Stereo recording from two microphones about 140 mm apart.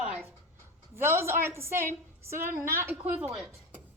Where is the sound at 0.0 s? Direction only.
10° right (ahead or behind).